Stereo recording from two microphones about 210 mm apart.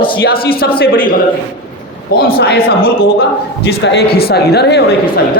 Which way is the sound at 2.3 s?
50° left (ahead or behind).